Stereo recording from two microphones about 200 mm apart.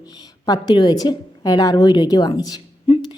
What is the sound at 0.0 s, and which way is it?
A woman's voice, 20° left (ahead or behind).